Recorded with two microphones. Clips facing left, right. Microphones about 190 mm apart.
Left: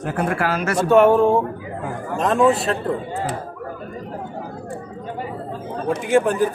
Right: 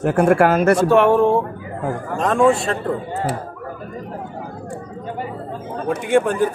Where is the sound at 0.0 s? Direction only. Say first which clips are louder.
Right 8 dB; 50° right (ahead or behind).